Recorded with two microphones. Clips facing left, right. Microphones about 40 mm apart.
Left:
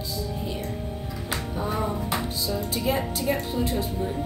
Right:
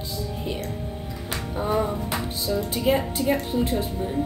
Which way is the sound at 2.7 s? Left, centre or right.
Right.